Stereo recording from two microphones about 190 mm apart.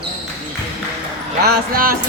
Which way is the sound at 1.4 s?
50° right (ahead or behind).